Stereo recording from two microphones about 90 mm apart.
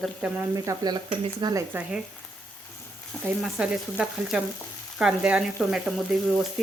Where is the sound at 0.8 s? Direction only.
55° right (ahead or behind).